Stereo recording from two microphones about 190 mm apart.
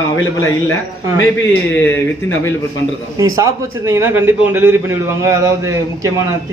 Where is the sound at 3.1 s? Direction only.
15° right (ahead or behind).